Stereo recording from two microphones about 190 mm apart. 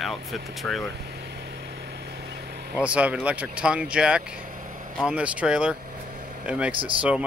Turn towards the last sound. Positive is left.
turn(degrees=-25)  # may be behind; listen again after turning